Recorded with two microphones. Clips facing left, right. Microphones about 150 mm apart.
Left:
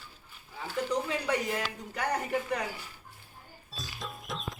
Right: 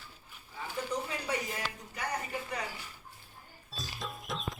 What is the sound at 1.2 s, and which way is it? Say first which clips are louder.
Speech: left 5 dB; 65° left (ahead or behind).